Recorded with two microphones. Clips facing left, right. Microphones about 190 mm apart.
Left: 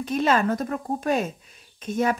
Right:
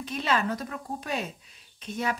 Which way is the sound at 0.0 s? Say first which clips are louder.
Left 6 dB; 45° left (ahead or behind).